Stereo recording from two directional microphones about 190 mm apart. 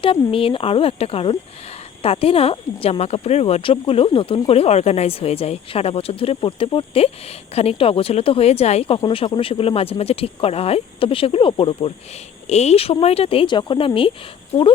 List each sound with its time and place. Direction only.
0.0 s speech: 30° left (ahead or behind)